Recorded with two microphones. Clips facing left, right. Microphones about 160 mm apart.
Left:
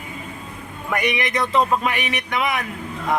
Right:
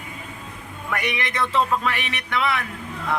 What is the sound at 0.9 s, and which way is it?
Speech, 15° left (ahead or behind).